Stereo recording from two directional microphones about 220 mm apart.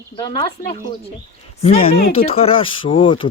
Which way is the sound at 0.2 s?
20° left (ahead or behind).